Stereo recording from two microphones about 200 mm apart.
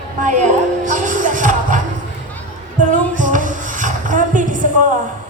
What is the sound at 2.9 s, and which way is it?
Music, 40° right (ahead or behind).